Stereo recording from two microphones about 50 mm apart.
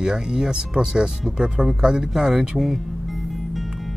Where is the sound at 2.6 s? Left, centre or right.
Centre.